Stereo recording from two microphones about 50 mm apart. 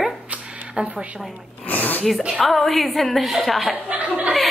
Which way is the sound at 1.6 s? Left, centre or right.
Left.